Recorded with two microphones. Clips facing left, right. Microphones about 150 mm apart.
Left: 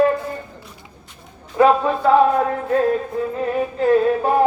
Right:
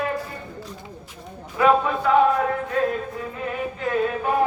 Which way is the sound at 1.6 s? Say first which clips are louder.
Left 4 dB; 35° left (ahead or behind).